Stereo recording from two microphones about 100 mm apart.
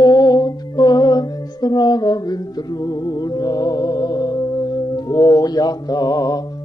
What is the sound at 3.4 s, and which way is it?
Music, 40° left (ahead or behind).